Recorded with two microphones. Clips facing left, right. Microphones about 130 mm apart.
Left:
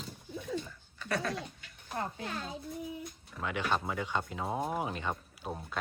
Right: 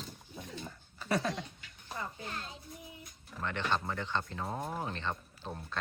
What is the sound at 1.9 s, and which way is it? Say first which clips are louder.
Speech: left 4 dB; 70° left (ahead or behind).